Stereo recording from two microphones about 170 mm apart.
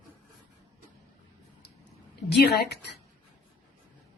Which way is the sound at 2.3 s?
75° left (ahead or behind).